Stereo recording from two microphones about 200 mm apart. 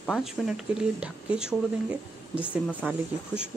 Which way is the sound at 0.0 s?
Centre (ahead or behind).